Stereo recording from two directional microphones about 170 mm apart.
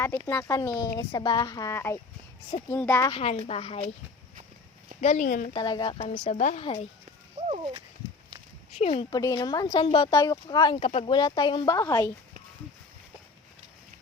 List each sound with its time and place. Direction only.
0.3 s speech: 15° left (ahead or behind)
3.1 s speech: 30° left (ahead or behind)
4.9 s speech: 45° left (ahead or behind)
5.5 s speech: 25° left (ahead or behind)
6.2 s speech: 45° left (ahead or behind)
7.3 s a sound: 40° right (ahead or behind)
8.8 s speech: 35° left (ahead or behind)
9.1 s speech: 20° left (ahead or behind)